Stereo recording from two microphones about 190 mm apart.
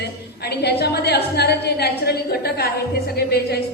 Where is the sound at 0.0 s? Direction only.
60° left (ahead or behind).